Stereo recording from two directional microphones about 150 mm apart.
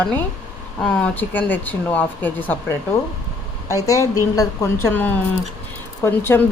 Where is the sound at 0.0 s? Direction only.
10° left (ahead or behind).